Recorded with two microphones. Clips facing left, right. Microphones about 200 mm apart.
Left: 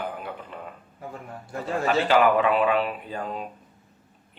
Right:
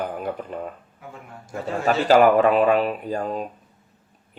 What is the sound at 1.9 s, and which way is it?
Speech, 40° right (ahead or behind).